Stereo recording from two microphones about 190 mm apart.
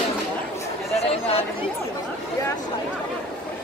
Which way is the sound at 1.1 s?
30° left (ahead or behind).